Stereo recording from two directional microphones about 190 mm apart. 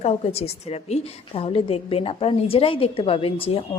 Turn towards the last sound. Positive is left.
turn(degrees=30)  # may be behind; listen again after turning